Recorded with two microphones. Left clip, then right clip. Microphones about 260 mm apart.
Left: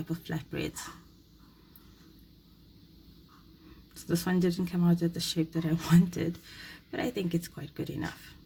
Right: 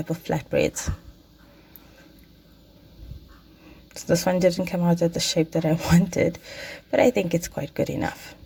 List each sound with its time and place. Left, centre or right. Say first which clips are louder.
0.1 s speech: right 16 dB; centre
4.1 s speech: right 11 dB; right